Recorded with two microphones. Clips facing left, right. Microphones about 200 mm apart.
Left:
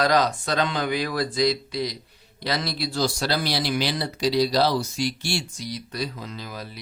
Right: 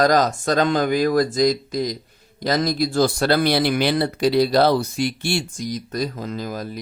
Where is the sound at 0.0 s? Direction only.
45° right (ahead or behind).